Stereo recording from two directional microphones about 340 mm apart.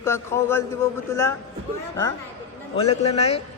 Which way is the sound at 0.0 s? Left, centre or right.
Centre.